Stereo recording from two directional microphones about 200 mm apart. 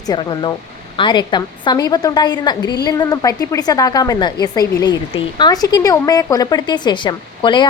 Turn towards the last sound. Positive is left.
turn(degrees=25)  # may be behind; listen again after turning